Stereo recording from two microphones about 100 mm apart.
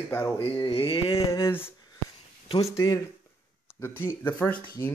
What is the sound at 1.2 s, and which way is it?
Speech, 30° left (ahead or behind).